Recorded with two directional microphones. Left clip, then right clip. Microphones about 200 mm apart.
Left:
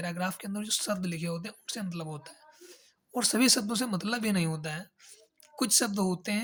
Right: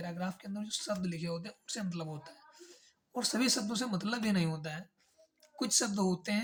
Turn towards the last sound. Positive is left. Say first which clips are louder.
# left 2 dB
turn(degrees=25)  # may be behind; listen again after turning